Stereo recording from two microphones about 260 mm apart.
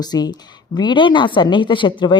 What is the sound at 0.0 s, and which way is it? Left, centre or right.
Speech, centre.